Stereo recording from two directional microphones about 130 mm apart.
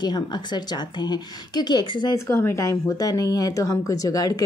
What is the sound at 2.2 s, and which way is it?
Speech, 20° left (ahead or behind).